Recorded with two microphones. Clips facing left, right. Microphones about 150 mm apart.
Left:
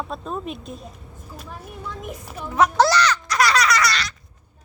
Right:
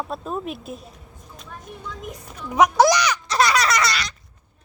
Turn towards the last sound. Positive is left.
turn(degrees=-20)  # may be behind; listen again after turning